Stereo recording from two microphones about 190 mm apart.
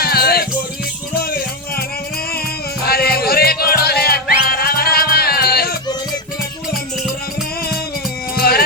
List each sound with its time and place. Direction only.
0.0 s music: 55° left (ahead or behind)
2.8 s music: 55° left (ahead or behind)
8.4 s music: 55° left (ahead or behind)